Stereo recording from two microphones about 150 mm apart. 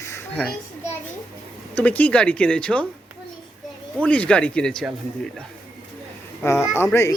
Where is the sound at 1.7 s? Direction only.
10° left (ahead or behind).